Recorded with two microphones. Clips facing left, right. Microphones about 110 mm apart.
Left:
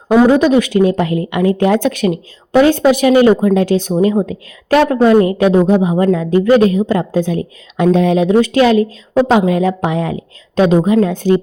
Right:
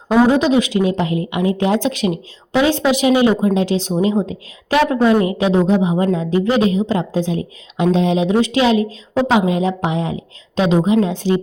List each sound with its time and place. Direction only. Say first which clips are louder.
0.3 s a woman's voice: left 4 dB; 50° left (ahead or behind)